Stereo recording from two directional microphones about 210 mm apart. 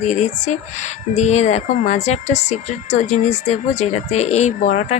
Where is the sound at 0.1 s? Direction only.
35° left (ahead or behind).